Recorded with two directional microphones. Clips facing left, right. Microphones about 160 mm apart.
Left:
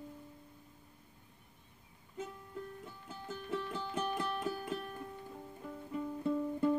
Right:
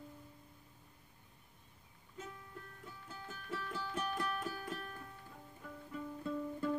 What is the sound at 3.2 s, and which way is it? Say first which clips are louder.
Music: left 6 dB; 20° left (ahead or behind).